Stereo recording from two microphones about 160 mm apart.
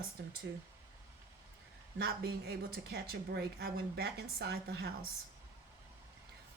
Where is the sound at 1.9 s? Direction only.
90° right.